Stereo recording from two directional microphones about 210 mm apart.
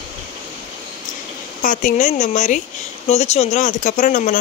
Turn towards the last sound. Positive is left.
turn(degrees=35)  # may be behind; listen again after turning